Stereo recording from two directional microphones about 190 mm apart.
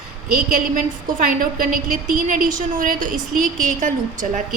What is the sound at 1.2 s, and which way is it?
A woman's voice, 50° right (ahead or behind).